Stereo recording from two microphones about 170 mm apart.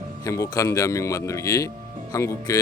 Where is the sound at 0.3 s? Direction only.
20° left (ahead or behind).